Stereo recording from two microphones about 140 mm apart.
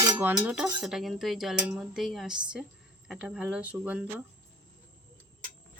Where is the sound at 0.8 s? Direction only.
Centre (ahead or behind).